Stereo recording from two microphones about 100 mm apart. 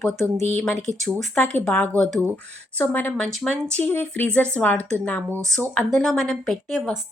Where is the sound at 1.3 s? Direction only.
15° left (ahead or behind).